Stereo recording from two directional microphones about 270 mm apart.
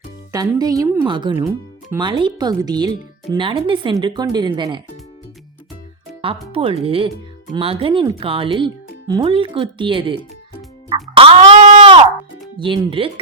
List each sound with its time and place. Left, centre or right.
0.3 s speech: centre
6.2 s speech: right
11.1 s a sound: right
12.5 s speech: centre